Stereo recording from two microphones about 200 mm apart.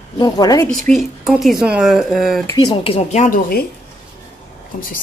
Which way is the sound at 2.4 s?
20° left (ahead or behind).